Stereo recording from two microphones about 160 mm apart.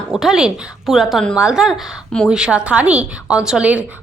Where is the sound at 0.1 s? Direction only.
Centre (ahead or behind).